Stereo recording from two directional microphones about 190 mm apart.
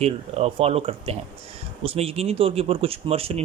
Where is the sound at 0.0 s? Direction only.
35° right (ahead or behind).